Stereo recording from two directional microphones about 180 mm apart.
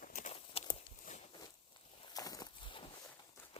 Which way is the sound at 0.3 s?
35° left (ahead or behind).